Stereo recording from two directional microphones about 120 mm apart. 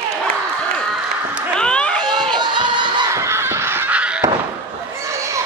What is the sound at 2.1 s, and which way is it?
Crowd, 35° right (ahead or behind).